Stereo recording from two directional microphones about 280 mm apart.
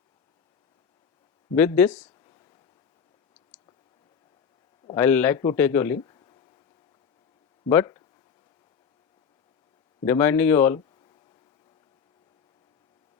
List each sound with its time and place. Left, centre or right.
1.5 s speech: centre
2.0 s a sound: centre
4.9 s a man's voice: centre
7.7 s speech: centre
10.1 s speech: centre